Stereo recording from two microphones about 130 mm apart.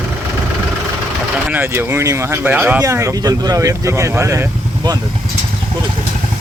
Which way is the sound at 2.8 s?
25° right (ahead or behind).